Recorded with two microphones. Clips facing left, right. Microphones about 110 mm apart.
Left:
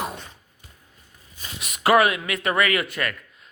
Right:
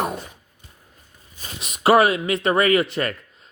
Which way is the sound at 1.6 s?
25° right (ahead or behind).